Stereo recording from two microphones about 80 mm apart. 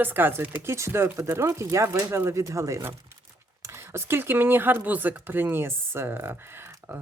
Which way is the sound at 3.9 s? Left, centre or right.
Right.